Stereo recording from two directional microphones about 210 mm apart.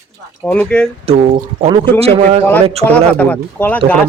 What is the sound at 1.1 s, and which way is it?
Speech, 30° right (ahead or behind).